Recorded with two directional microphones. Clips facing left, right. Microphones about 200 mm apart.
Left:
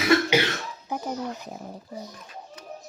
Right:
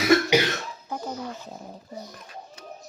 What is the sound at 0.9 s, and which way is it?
Speech, 15° left (ahead or behind).